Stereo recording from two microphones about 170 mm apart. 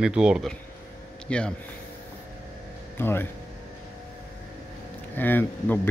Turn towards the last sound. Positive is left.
turn(degrees=10)  # may be behind; listen again after turning